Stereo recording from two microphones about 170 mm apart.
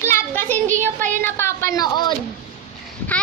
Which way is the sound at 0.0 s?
15° left (ahead or behind).